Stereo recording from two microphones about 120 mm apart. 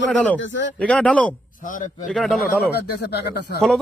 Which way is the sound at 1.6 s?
90° left.